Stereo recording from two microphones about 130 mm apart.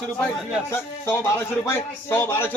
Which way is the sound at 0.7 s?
20° left (ahead or behind).